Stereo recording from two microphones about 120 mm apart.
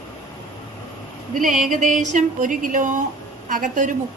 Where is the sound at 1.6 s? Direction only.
90° right.